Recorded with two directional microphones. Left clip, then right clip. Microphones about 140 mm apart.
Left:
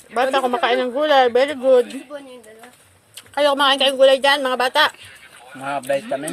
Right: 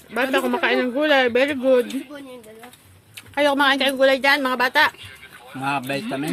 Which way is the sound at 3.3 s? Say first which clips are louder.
Left 2 dB; 10° left (ahead or behind).